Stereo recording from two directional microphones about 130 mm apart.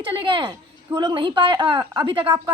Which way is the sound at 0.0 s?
40° right (ahead or behind).